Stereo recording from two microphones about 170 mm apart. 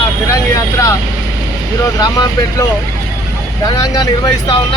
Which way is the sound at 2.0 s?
25° left (ahead or behind).